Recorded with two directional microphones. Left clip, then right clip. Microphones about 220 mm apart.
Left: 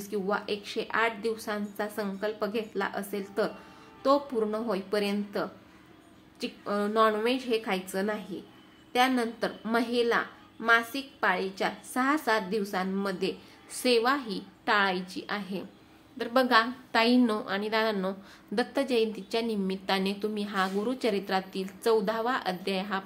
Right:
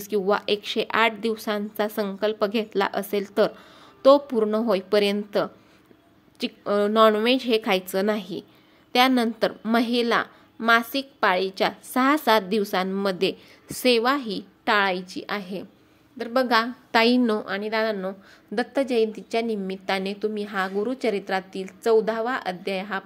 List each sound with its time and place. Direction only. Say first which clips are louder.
0.0 s a woman's voice: right 8 dB; 40° right (ahead or behind)